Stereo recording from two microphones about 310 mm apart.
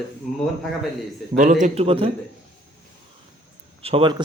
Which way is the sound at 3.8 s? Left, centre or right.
Centre.